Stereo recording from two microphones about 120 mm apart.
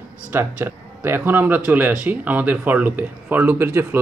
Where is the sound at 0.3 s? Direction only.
15° right (ahead or behind).